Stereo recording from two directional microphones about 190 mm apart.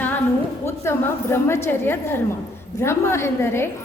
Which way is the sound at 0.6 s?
15° left (ahead or behind).